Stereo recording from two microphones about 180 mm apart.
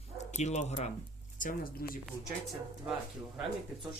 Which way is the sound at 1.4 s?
55° left (ahead or behind).